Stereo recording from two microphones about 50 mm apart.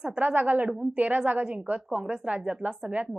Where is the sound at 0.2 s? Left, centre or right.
Right.